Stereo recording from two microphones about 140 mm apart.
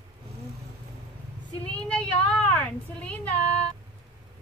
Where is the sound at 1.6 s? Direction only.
5° left (ahead or behind).